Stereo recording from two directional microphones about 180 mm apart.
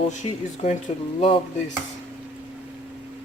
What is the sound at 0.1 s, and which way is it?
Speech, 40° left (ahead or behind).